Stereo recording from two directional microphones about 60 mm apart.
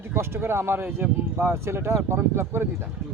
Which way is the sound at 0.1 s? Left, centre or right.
Right.